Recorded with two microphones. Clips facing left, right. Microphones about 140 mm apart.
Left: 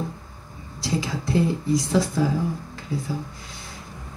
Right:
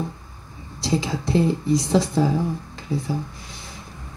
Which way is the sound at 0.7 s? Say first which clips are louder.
Right 3 dB; 25° right (ahead or behind).